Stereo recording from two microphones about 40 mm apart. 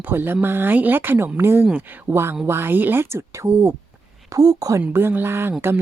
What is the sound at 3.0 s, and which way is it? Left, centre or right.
Speech, right.